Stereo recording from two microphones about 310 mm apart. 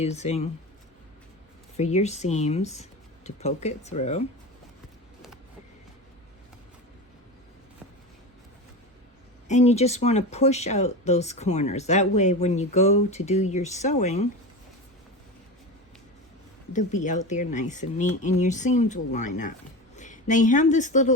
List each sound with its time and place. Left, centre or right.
0.0 s speech: left
1.7 s speech: left
9.5 s speech: left
16.7 s speech: left